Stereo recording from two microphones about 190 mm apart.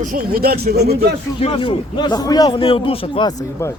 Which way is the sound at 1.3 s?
30° left (ahead or behind).